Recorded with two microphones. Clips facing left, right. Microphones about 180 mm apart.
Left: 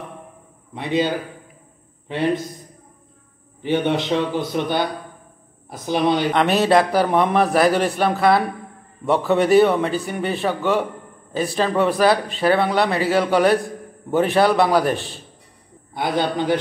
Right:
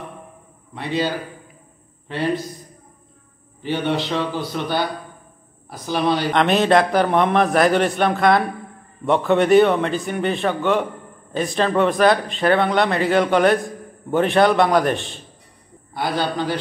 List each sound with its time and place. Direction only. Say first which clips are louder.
0.7 s a man's voice: left 2 dB; 20° left (ahead or behind)
3.6 s a man's voice: left 2 dB; 20° left (ahead or behind)
6.3 s a man's voice: right 2 dB; 5° left (ahead or behind)
15.9 s a man's voice: left 1 dB; 20° left (ahead or behind)